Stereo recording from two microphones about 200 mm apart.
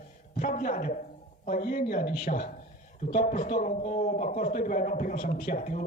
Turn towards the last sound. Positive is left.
turn(degrees=40)  # may be behind; listen again after turning